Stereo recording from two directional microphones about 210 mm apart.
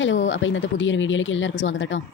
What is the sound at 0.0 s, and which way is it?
Speech, 65° left (ahead or behind).